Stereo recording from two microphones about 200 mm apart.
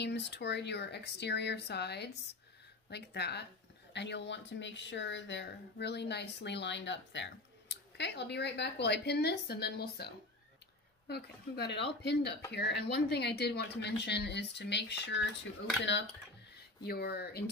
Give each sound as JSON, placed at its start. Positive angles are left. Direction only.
{"t": 0.0, "sound": "speech", "side_deg": 60}
{"t": 16.8, "sound": "speech", "side_deg": 50}